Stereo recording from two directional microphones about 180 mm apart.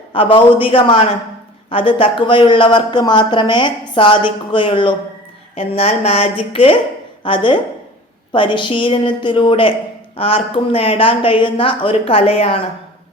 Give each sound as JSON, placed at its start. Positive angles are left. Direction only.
{"t": 0.1, "sound": "a man's voice", "side_deg": 30}